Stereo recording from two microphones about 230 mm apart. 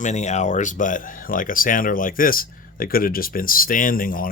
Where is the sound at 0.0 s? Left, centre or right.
Left.